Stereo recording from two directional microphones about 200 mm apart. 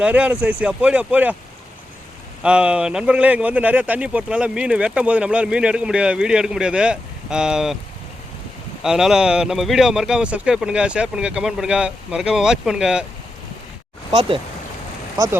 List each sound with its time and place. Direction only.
0.0 s speech: 5° right (ahead or behind)
2.4 s speech: 5° right (ahead or behind)
8.8 s speech: 5° right (ahead or behind)
14.1 s speech: 25° right (ahead or behind)